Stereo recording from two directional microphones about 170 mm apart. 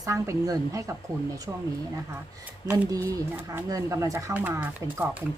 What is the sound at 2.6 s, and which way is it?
A woman's voice, 15° right (ahead or behind).